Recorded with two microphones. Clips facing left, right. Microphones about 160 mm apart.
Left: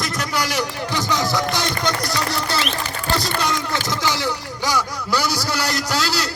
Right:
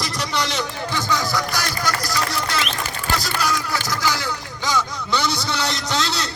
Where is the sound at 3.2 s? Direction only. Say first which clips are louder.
Left 1 dB; 25° left (ahead or behind).